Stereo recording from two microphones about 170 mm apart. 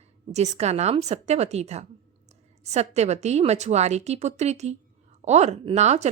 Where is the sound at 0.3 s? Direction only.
40° right (ahead or behind).